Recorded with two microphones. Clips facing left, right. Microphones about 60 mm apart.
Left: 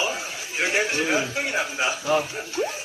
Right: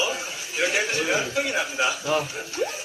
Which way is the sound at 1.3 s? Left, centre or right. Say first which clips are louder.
Right 1 dB; left.